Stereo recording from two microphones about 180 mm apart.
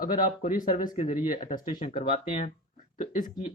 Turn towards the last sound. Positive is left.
turn(degrees=45)  # may be behind; listen again after turning